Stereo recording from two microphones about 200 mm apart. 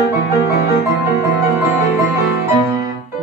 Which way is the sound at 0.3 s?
50° left (ahead or behind).